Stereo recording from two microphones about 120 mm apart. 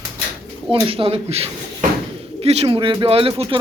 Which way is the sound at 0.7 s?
50° right (ahead or behind).